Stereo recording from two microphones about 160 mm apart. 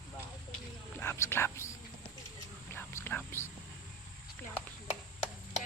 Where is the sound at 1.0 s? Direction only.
15° left (ahead or behind).